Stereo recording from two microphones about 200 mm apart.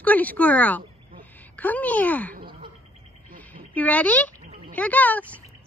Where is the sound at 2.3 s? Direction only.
45° right (ahead or behind).